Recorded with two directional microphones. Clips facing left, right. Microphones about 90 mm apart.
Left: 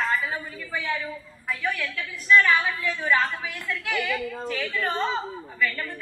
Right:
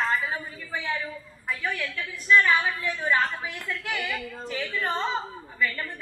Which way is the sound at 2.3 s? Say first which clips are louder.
Left 1 dB; 20° right (ahead or behind).